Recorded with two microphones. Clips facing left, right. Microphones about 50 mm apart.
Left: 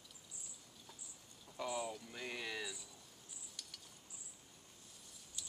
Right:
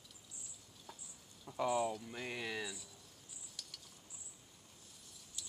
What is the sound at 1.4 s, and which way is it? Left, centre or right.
Speech, centre.